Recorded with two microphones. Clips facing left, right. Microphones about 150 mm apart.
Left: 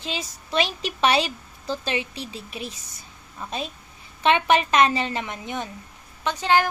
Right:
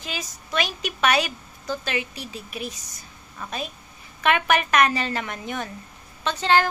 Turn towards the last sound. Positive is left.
turn(degrees=15)  # may be behind; listen again after turning